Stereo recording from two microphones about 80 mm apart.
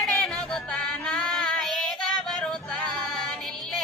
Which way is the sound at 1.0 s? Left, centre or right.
Centre.